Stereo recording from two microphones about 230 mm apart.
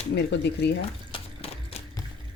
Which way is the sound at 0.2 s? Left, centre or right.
Left.